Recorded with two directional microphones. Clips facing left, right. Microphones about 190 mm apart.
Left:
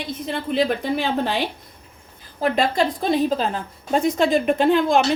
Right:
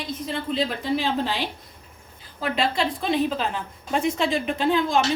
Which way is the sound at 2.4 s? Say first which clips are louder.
Left 5 dB; 40° left (ahead or behind).